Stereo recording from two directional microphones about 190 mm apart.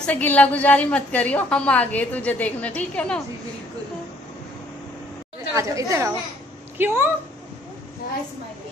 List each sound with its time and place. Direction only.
0.0 s a woman's voice: 10° left (ahead or behind)
5.6 s speech: 15° right (ahead or behind)